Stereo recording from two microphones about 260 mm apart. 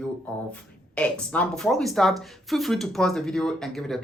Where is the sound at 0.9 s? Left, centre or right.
Centre.